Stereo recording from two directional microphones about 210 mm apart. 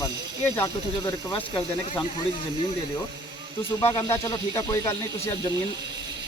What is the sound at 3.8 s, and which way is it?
Speech, 15° left (ahead or behind).